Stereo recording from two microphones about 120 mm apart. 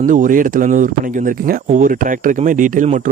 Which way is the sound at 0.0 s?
90° right.